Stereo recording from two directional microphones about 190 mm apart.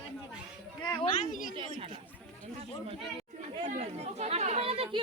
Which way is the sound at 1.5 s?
30° right (ahead or behind).